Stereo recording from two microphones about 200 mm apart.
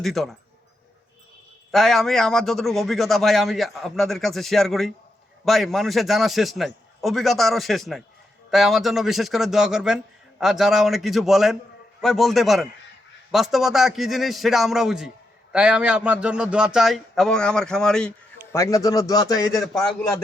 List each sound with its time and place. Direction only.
0.0 s a man's voice: centre (ahead or behind)
1.7 s a man's voice: centre (ahead or behind)
18.5 s a man's voice: 15° left (ahead or behind)
19.6 s a man's voice: centre (ahead or behind)